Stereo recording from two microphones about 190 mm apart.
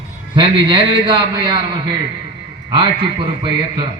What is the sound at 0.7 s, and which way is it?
A man's voice, 25° right (ahead or behind).